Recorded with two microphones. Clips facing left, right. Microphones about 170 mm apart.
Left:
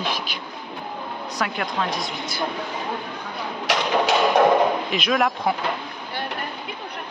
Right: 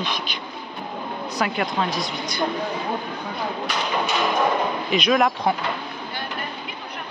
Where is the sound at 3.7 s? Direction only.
90° left.